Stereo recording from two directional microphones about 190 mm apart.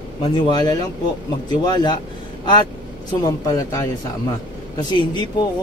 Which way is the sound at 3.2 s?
20° left (ahead or behind).